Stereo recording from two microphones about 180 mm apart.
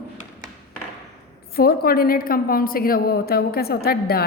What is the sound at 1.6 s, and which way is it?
A woman's voice, 55° left (ahead or behind).